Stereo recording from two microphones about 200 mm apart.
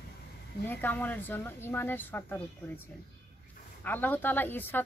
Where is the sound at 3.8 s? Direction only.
10° left (ahead or behind).